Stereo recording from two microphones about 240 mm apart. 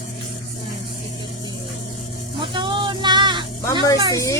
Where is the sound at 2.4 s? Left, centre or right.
Centre.